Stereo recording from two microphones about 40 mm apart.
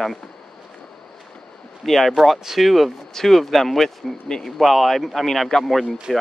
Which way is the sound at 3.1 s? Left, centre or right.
Centre.